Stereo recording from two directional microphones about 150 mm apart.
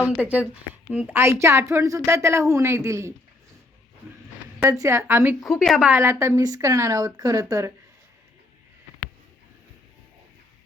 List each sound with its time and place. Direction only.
0.2 s a woman's voice: 10° right (ahead or behind)
4.6 s a woman's voice: 20° right (ahead or behind)
5.4 s speech: centre (ahead or behind); by 7.7 s 20° right (ahead or behind)